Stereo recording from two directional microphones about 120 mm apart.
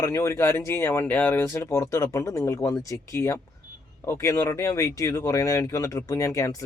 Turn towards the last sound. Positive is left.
turn(degrees=25)  # may be behind; listen again after turning